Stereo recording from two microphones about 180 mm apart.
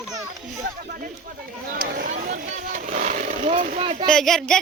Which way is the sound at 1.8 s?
50° right (ahead or behind).